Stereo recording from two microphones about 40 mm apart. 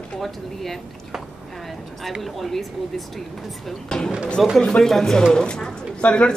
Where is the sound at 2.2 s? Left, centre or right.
Centre.